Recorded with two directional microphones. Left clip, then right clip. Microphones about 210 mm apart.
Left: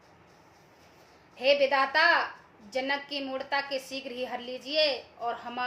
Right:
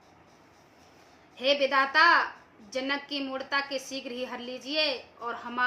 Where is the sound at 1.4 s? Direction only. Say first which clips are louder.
Left 1 dB; 15° right (ahead or behind).